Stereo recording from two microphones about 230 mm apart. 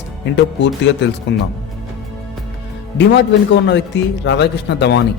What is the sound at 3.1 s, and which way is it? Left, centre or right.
A man's voice, left.